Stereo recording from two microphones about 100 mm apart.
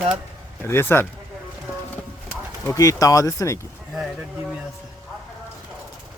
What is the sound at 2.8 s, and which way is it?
Speech, 35° left (ahead or behind).